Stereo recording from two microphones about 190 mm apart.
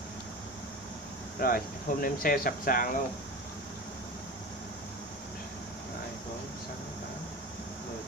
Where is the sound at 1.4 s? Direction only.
50° left (ahead or behind).